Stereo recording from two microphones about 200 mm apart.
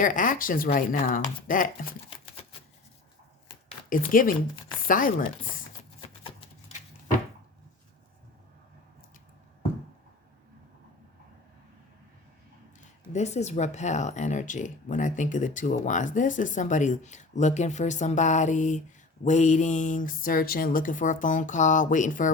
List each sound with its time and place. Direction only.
0.0 s speech: 40° left (ahead or behind)
2.0 s typewriter: 25° left (ahead or behind)
3.8 s speech: 45° left (ahead or behind)
13.1 s speech: 35° left (ahead or behind)